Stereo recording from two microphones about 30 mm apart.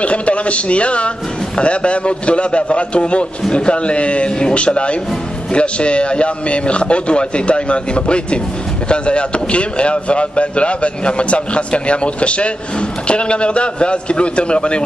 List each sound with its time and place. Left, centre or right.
0.0 s a man's voice: left